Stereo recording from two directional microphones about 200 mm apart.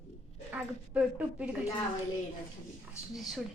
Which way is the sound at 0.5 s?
5° right (ahead or behind).